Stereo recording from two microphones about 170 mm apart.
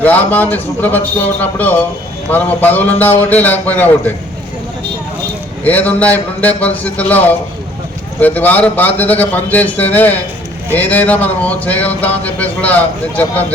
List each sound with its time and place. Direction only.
0.0 s speech: 10° left (ahead or behind)
5.6 s speech: 10° left (ahead or behind)